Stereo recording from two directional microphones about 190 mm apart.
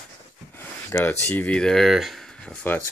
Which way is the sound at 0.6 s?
10° left (ahead or behind).